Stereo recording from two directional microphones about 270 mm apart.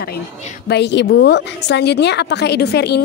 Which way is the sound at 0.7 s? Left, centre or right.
Left.